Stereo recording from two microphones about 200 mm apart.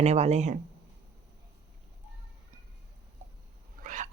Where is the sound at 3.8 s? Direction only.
40° right (ahead or behind).